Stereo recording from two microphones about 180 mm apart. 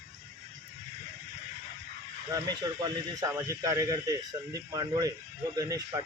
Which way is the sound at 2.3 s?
20° right (ahead or behind).